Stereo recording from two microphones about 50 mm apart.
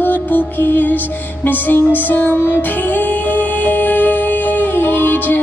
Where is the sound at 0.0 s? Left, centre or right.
Left.